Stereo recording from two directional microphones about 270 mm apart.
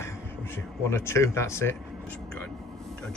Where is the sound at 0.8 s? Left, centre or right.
Centre.